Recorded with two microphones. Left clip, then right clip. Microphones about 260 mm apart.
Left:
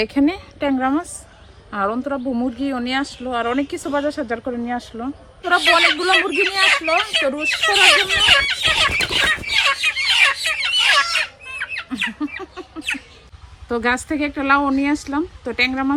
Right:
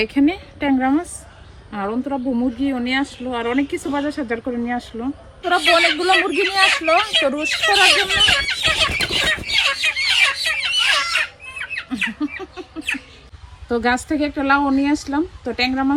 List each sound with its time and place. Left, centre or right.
0.0 s speech: left
0.7 s speech: centre
2.6 s speech: left
3.2 s speech: centre
8.9 s fowl: centre
10.9 s a sound: centre
13.7 s speech: centre